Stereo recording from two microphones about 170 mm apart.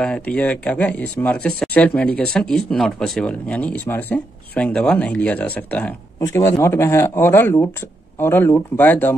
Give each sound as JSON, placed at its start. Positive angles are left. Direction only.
{"t": 0.0, "sound": "speech", "side_deg": 5}